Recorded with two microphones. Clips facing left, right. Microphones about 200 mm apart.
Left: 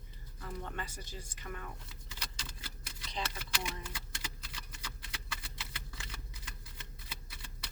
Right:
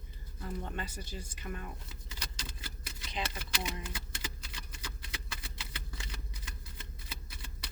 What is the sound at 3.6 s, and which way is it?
Speech, 5° right (ahead or behind).